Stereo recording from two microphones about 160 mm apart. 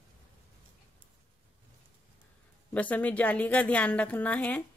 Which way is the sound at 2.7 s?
10° left (ahead or behind).